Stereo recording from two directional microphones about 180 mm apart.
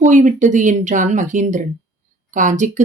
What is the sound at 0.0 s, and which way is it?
Speech, 45° right (ahead or behind).